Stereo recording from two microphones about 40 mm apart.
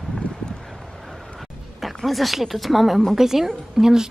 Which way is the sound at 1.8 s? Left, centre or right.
Centre.